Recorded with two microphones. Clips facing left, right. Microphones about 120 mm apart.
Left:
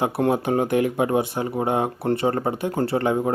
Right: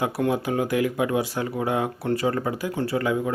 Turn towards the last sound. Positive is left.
turn(degrees=35)  # may be behind; listen again after turning